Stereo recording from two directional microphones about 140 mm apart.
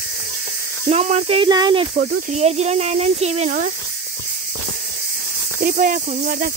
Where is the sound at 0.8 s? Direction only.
55° right (ahead or behind); by 1.9 s 35° right (ahead or behind).